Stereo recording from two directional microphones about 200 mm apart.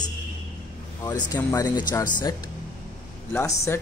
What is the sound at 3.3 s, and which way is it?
Speech, 10° left (ahead or behind).